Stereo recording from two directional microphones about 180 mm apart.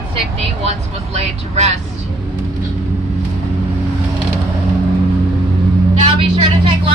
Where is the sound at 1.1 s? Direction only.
35° right (ahead or behind).